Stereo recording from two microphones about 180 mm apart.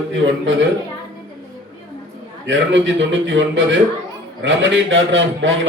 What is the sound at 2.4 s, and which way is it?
A man's voice, 90° right.